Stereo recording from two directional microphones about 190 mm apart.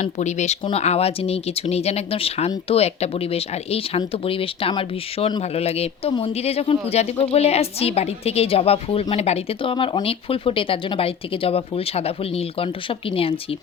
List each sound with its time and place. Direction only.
0.0 s speech: 40° left (ahead or behind)